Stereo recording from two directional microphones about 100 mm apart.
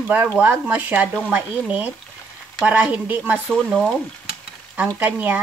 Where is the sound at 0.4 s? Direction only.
15° right (ahead or behind).